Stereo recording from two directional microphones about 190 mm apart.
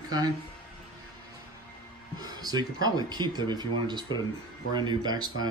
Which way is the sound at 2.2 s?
20° right (ahead or behind).